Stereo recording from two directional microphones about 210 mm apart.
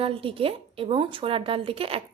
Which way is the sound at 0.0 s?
25° right (ahead or behind).